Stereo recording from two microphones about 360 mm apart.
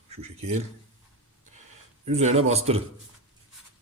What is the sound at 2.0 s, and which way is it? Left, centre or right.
Speech, centre.